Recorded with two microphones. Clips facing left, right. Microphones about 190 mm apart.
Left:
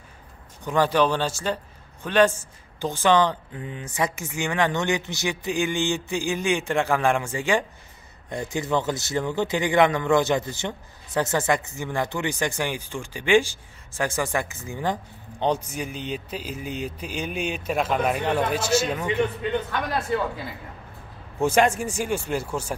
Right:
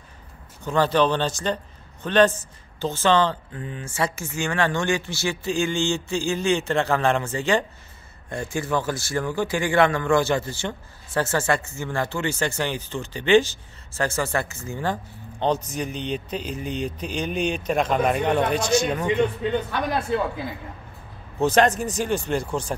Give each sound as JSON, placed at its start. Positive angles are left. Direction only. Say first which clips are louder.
{"t": 0.7, "sound": "speech", "louder": "right 1 dB", "side_deg": 10}
{"t": 21.4, "sound": "speech", "louder": "right 1 dB", "side_deg": 10}